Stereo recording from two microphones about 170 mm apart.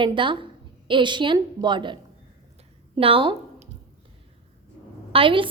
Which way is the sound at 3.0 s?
30° right (ahead or behind).